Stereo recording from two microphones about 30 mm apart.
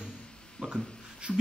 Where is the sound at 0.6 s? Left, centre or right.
Centre.